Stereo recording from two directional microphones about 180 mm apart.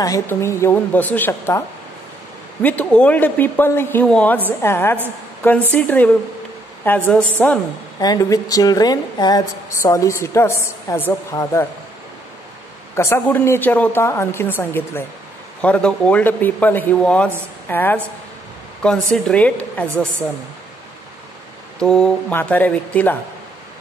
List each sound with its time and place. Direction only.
0.0 s a woman's voice: 15° left (ahead or behind)
2.6 s a woman's voice: 10° left (ahead or behind)
8.0 s a woman's voice: 20° left (ahead or behind)
12.9 s a woman's voice: 15° left (ahead or behind)
21.7 s a woman's voice: 5° left (ahead or behind)